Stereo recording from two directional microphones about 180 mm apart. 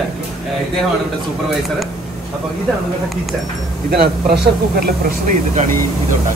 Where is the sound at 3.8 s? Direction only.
60° right (ahead or behind).